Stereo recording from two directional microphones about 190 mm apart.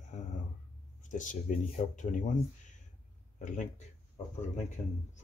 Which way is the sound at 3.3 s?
40° left (ahead or behind).